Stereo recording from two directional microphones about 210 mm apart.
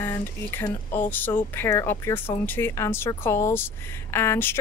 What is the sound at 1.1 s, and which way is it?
Speech, 10° left (ahead or behind).